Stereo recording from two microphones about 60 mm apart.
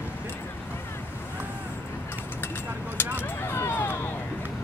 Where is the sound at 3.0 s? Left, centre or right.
Left.